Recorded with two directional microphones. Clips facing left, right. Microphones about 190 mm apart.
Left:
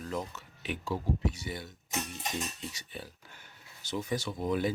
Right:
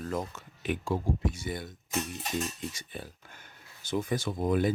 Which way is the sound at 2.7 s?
50° right (ahead or behind).